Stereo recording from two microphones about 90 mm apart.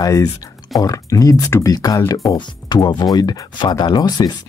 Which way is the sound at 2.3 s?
55° left (ahead or behind).